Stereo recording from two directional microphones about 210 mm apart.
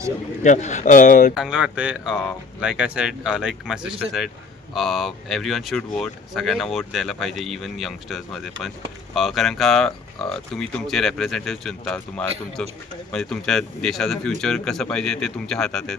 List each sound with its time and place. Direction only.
0.4 s speech: 35° left (ahead or behind)
1.4 s speech: 5° right (ahead or behind)